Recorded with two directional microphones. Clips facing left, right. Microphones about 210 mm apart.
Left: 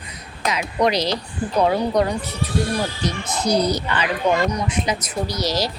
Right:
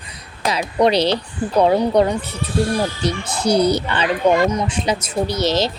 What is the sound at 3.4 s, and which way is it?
Speech, 30° right (ahead or behind).